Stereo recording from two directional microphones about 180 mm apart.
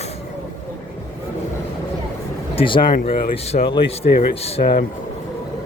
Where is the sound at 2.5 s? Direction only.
30° left (ahead or behind).